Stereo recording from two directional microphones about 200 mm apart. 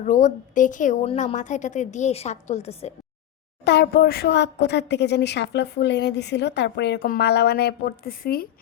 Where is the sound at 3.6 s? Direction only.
55° left (ahead or behind).